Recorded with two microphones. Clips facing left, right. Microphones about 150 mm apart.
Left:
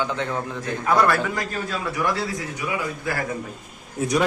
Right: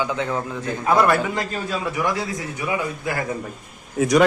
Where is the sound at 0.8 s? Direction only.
20° right (ahead or behind).